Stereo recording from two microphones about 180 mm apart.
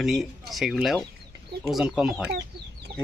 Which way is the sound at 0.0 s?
Centre (ahead or behind).